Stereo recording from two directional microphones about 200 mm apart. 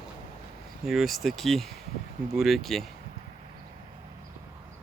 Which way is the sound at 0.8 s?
Centre (ahead or behind).